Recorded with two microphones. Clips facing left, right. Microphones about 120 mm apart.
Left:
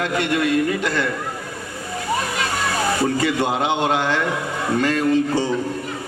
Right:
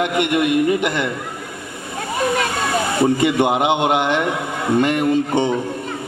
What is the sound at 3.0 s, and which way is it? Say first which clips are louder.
A man's voice: right 7 dB; 20° right (ahead or behind).